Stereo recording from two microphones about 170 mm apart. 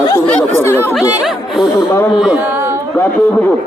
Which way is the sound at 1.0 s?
5° right (ahead or behind).